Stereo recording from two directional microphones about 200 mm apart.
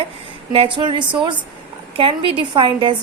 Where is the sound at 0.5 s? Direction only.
25° right (ahead or behind).